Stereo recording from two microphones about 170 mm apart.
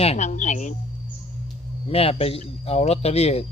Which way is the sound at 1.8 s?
35° left (ahead or behind).